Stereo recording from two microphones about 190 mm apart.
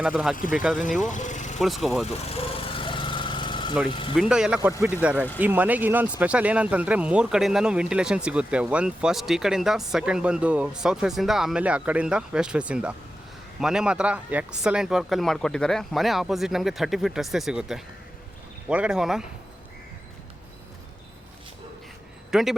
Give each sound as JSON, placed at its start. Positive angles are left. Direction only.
{"t": 0.0, "sound": "speech", "side_deg": 0}
{"t": 1.0, "sound": "vehicle", "side_deg": 40}
{"t": 1.5, "sound": "speech", "side_deg": 0}
{"t": 2.3, "sound": "lawn mower", "side_deg": 30}
{"t": 4.1, "sound": "speech", "side_deg": -5}
{"t": 22.3, "sound": "speech", "side_deg": 0}